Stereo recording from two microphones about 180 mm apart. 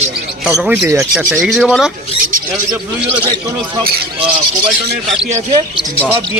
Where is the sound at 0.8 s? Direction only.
15° right (ahead or behind).